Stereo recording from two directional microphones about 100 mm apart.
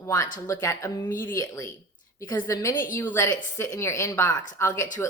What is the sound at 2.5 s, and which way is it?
Speech, 30° left (ahead or behind).